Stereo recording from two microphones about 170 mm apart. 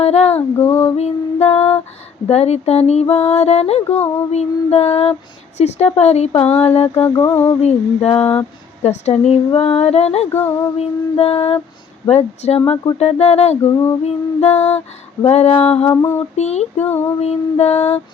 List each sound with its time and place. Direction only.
0.0 s female singing: 40° left (ahead or behind)
0.3 s mantra: 15° left (ahead or behind)
0.9 s female singing: 40° left (ahead or behind)
6.9 s mantra: 15° left (ahead or behind)
7.6 s female singing: 40° left (ahead or behind)
15.9 s mantra: 15° left (ahead or behind)
16.3 s female singing: 40° left (ahead or behind)
16.8 s mantra: 10° left (ahead or behind)
17.2 s female singing: 40° left (ahead or behind)